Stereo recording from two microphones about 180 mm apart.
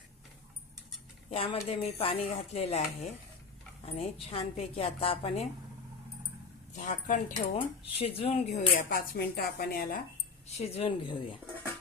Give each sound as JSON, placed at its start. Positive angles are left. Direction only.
{"t": 1.3, "sound": "a woman's voice", "side_deg": 30}
{"t": 6.7, "sound": "speech", "side_deg": 45}
{"t": 7.9, "sound": "speech", "side_deg": 30}
{"t": 10.6, "sound": "speech", "side_deg": 30}